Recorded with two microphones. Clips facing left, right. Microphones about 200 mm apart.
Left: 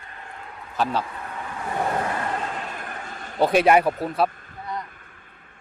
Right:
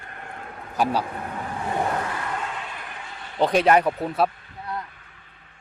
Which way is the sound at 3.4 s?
10° left (ahead or behind).